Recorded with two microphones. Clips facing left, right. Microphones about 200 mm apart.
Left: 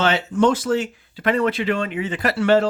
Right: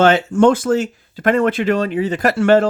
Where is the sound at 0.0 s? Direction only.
50° right (ahead or behind).